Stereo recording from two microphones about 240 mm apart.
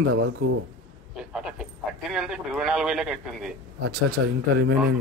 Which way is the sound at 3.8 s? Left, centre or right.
Right.